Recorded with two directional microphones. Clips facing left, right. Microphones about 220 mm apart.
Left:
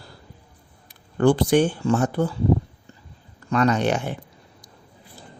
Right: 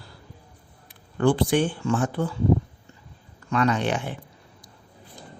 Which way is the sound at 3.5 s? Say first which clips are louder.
Left 3 dB; 40° left (ahead or behind).